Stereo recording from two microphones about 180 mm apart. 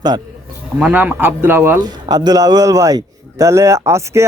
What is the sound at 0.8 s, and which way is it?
A man's voice, 10° right (ahead or behind).